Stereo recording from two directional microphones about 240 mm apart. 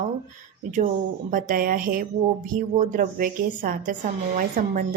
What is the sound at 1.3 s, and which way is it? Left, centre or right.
Speech, right.